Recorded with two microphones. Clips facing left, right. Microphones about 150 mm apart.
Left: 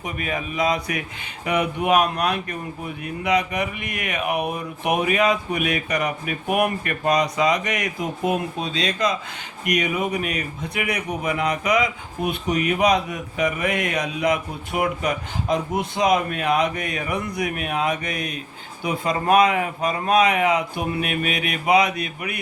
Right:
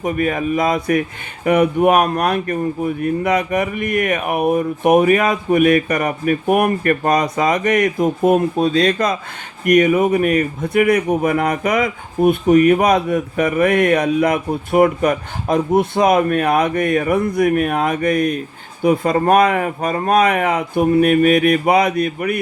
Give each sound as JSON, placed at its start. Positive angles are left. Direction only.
{"t": 0.0, "sound": "speech", "side_deg": -45}